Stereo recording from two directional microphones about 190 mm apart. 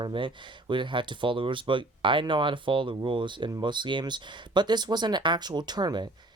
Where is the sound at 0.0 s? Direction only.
25° right (ahead or behind).